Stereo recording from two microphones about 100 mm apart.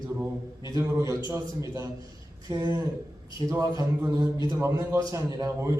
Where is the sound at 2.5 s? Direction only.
40° right (ahead or behind).